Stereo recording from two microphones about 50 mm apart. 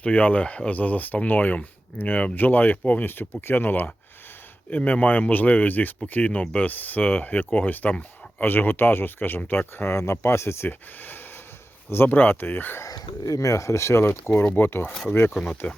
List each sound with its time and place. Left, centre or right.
0.0 s speech: left
6.4 s speech: left
6.7 s speech: left
9.9 s speech: left
10.7 s speech: left
12.8 s speech: left
15.6 s speech: left